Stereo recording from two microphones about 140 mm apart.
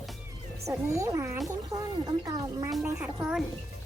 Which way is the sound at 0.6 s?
20° right (ahead or behind).